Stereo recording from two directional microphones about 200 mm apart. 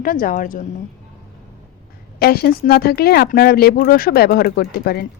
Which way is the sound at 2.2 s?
50° left (ahead or behind).